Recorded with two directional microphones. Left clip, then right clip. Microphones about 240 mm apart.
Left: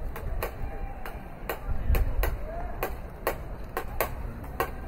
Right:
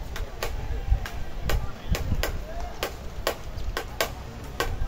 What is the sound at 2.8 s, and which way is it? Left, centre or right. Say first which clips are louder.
Tick-tock: right 3 dB; left.